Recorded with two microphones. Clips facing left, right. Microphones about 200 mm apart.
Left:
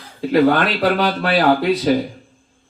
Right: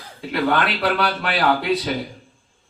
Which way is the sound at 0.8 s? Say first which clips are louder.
Left 4 dB; 40° left (ahead or behind).